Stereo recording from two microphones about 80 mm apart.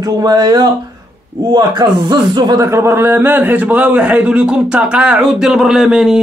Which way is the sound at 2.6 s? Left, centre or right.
Right.